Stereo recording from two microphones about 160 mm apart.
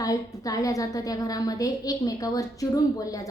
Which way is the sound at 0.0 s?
20° left (ahead or behind).